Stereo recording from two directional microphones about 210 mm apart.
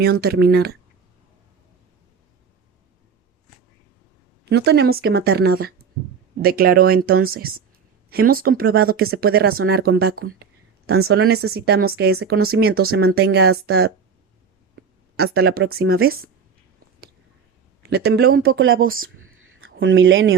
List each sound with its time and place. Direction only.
0.0 s speech: 50° right (ahead or behind)
4.4 s speech: 55° right (ahead or behind)
11.2 s speech: 90° right
11.5 s speech: 50° right (ahead or behind)
15.1 s speech: 50° right (ahead or behind)
17.8 s speech: 50° right (ahead or behind)
18.4 s speech: 70° right (ahead or behind)
18.9 s a sound: 75° right (ahead or behind)